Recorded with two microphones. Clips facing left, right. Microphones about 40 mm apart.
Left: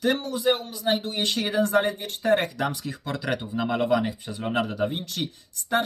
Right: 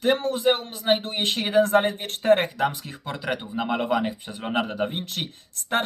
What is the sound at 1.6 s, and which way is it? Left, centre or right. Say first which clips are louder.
Speech: right 4 dB; right.